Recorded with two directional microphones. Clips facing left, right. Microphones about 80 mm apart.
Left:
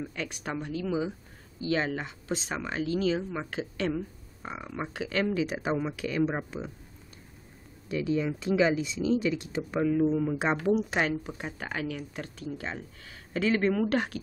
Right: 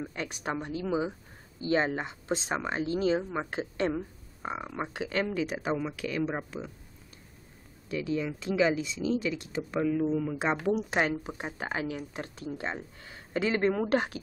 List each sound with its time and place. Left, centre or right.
0.1 s speech: right
5.3 s speech: centre
7.9 s speech: centre
10.7 s speech: centre
11.1 s speech: right